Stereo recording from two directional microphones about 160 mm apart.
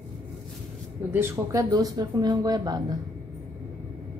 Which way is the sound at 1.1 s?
15° right (ahead or behind).